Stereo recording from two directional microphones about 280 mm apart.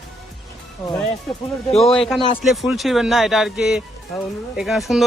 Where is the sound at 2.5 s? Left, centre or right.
Centre.